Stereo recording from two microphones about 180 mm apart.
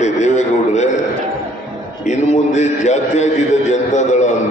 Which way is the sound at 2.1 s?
40° left (ahead or behind).